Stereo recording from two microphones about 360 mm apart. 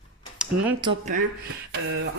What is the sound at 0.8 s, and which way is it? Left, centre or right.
Speech, centre.